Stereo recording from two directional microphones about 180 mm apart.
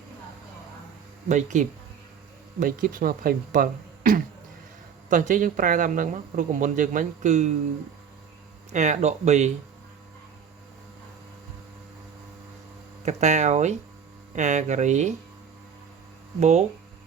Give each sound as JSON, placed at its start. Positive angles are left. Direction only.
{"t": 1.3, "sound": "speech", "side_deg": -40}
{"t": 8.7, "sound": "speech", "side_deg": -40}
{"t": 13.1, "sound": "speech", "side_deg": -40}
{"t": 16.4, "sound": "speech", "side_deg": -40}